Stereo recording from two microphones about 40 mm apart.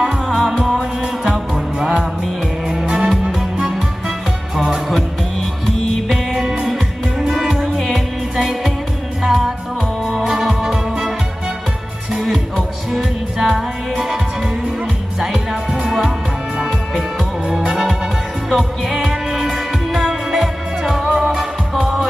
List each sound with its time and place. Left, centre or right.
0.0 s music: centre
2.8 s music: right
4.5 s music: centre
6.3 s music: centre
12.1 s music: centre
18.5 s music: centre
21.0 s music: right
21.8 s music: centre